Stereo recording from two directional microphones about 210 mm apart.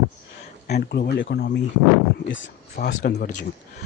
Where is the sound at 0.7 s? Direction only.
50° left (ahead or behind).